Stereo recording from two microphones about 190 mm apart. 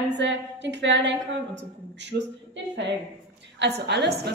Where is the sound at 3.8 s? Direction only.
60° right (ahead or behind).